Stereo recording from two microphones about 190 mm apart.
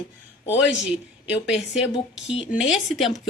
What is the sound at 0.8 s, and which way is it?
A woman's voice, 5° right (ahead or behind).